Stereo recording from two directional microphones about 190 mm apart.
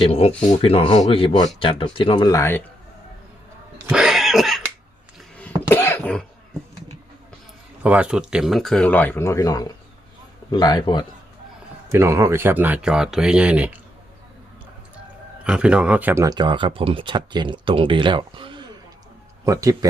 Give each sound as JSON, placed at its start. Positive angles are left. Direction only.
{"t": 0.0, "sound": "speech", "side_deg": 30}
{"t": 3.8, "sound": "cough", "side_deg": -5}
{"t": 5.6, "sound": "cough", "side_deg": 10}
{"t": 7.8, "sound": "speech", "side_deg": -5}
{"t": 11.9, "sound": "speech", "side_deg": -15}
{"t": 15.4, "sound": "speech", "side_deg": -5}